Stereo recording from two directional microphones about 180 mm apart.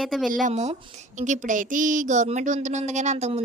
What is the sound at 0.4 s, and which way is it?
A woman's voice, 40° right (ahead or behind).